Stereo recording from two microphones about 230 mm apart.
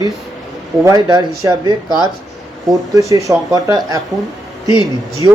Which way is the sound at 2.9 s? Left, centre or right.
Centre.